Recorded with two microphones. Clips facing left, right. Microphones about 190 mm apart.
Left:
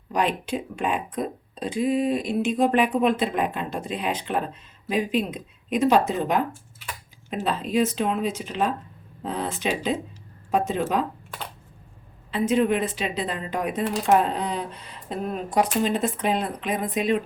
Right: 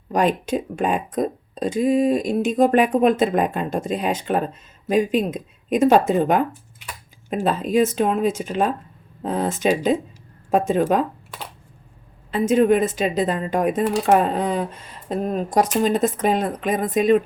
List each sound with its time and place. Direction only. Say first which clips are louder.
0.1 s speech: right 5 dB; 45° right (ahead or behind)
7.4 s speech: right 4 dB; 45° right (ahead or behind)
12.3 s speech: right 5 dB; 45° right (ahead or behind)